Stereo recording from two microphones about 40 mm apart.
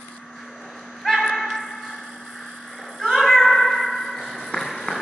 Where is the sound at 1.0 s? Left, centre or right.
Centre.